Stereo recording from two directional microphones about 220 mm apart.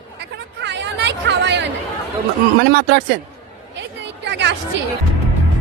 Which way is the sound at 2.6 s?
45° right (ahead or behind).